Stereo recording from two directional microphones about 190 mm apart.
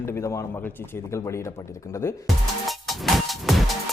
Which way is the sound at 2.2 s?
Centre (ahead or behind).